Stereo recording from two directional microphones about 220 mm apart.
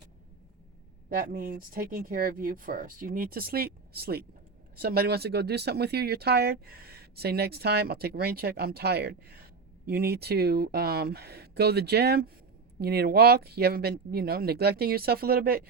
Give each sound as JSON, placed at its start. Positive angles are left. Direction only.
{"t": 1.2, "sound": "speech", "side_deg": -40}